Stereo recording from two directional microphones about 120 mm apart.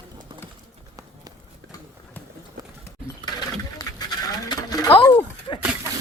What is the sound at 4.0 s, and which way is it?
Bird, 35° left (ahead or behind).